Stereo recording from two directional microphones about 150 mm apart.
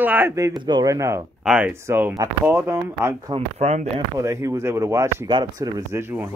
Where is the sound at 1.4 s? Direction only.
5° right (ahead or behind).